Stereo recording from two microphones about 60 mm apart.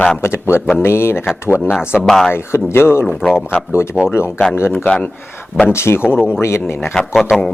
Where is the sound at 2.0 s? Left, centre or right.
Centre.